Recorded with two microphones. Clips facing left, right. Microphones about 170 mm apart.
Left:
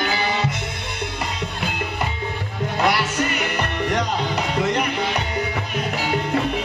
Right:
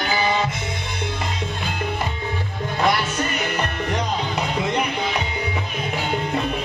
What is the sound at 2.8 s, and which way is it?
Music, 70° left (ahead or behind).